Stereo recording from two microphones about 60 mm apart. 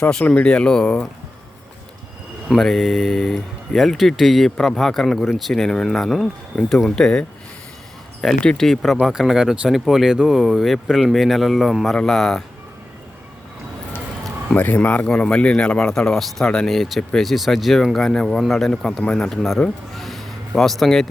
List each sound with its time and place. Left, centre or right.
0.0 s speech: centre
2.6 s speech: centre
14.5 s speech: left; by 17.0 s centre
17.0 s speech: centre
17.2 s speech: centre
19.0 s speech: centre
19.3 s speech: centre